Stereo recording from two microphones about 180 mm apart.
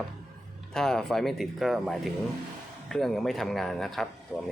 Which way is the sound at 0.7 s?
5° left (ahead or behind).